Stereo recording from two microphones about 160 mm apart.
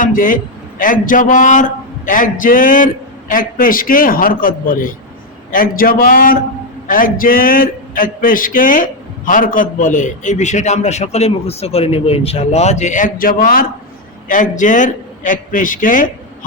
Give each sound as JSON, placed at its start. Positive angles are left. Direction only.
{"t": 0.0, "sound": "a man's voice", "side_deg": 55}